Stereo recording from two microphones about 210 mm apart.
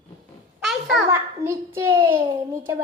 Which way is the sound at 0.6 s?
Centre (ahead or behind).